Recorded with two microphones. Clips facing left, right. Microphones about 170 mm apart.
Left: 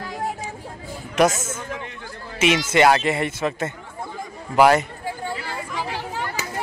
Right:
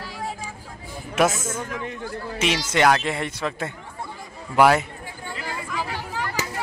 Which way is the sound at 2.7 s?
5° left (ahead or behind).